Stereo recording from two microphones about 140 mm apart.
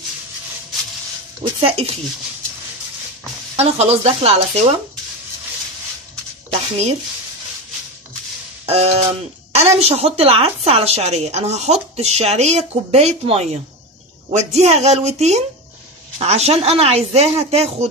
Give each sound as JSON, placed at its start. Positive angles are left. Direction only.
{"t": 1.4, "sound": "speech", "side_deg": -40}
{"t": 3.5, "sound": "a woman's voice", "side_deg": -50}
{"t": 8.6, "sound": "a woman's voice", "side_deg": -45}